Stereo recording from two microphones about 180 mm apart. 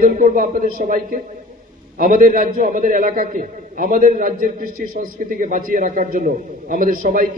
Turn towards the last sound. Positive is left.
turn(degrees=-50)  # may be behind; listen again after turning